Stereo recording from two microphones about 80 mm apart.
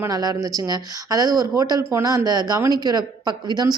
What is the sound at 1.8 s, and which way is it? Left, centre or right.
Speech, right.